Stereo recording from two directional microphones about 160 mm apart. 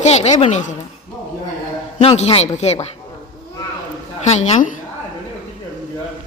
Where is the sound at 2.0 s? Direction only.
40° left (ahead or behind).